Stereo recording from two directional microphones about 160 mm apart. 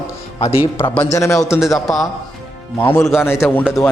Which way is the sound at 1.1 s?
20° left (ahead or behind).